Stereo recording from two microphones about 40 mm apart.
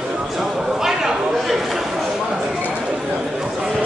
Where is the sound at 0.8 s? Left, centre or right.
Centre.